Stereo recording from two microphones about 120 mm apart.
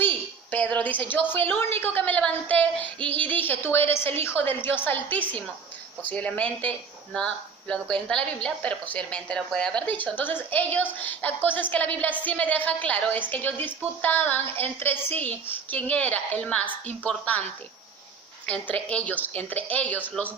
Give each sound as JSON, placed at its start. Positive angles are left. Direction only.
{"t": 0.0, "sound": "a woman's voice", "side_deg": 15}
{"t": 18.4, "sound": "speech", "side_deg": 10}